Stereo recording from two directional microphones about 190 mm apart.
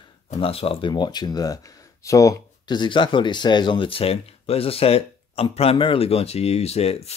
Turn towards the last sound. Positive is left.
turn(degrees=35)  # may be behind; listen again after turning